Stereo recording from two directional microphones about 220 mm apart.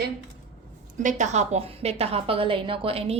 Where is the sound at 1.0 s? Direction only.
30° right (ahead or behind).